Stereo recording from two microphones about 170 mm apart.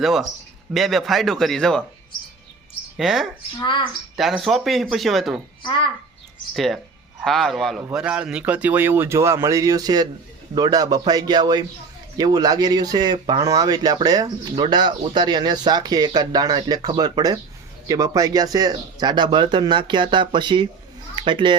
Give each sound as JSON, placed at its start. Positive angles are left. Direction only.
{"t": 0.0, "sound": "speech", "side_deg": 0}
{"t": 3.0, "sound": "speech", "side_deg": 0}
{"t": 3.6, "sound": "a child's voice", "side_deg": 30}
{"t": 4.2, "sound": "speech", "side_deg": 0}
{"t": 5.6, "sound": "a child's voice", "side_deg": 30}
{"t": 6.5, "sound": "speech", "side_deg": 0}